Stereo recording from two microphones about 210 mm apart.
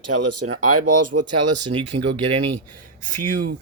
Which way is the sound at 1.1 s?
80° right.